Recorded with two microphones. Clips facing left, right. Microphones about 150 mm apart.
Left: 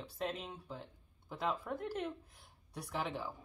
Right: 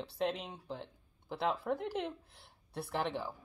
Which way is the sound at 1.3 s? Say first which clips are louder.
Right 4 dB; 10° right (ahead or behind).